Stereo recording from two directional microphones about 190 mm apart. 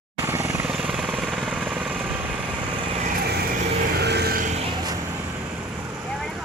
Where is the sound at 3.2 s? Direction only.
55° right (ahead or behind).